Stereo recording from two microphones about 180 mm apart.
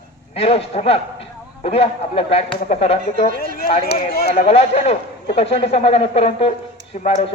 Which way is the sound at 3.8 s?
60° left (ahead or behind).